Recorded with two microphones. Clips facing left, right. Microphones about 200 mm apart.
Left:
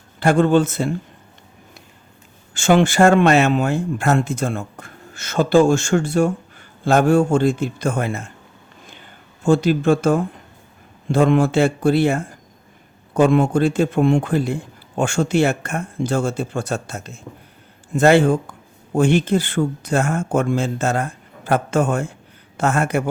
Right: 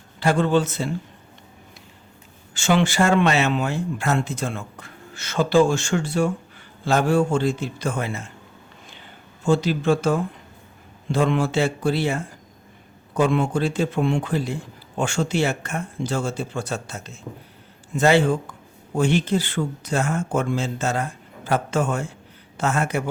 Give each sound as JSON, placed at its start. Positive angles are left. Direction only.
{"t": 0.2, "sound": "a man's voice", "side_deg": 50}
{"t": 2.6, "sound": "a man's voice", "side_deg": 50}
{"t": 8.9, "sound": "a sound", "side_deg": 50}
{"t": 11.1, "sound": "a man's voice", "side_deg": 50}